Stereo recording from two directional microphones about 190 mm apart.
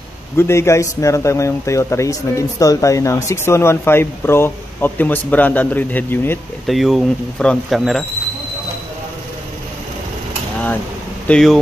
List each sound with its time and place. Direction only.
0.4 s speech: 15° left (ahead or behind)
6.7 s speech: centre (ahead or behind)
11.2 s speech: 5° left (ahead or behind)